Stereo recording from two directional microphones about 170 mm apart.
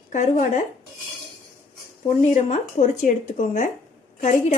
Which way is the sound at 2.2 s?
45° left (ahead or behind).